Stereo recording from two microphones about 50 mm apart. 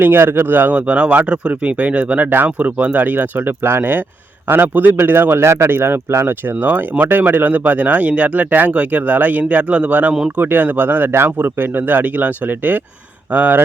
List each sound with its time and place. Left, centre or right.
0.0 s speech: right
3.6 s a man's voice: right
11.1 s a man's voice: right
11.3 s speech: right